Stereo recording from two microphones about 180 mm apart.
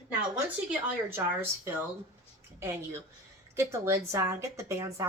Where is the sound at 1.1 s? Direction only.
10° right (ahead or behind).